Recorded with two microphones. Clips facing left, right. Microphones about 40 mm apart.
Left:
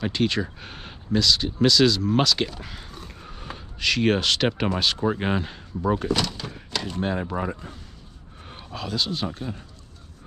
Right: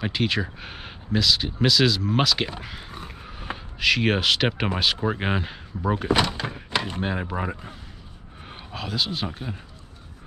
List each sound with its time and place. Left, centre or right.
0.0 s speech: centre
2.6 s a sound: centre
3.5 s speech: centre
6.0 s speech: right
7.0 s speech: centre